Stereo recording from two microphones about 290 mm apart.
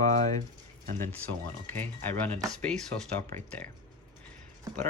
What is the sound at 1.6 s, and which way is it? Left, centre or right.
Speech, centre.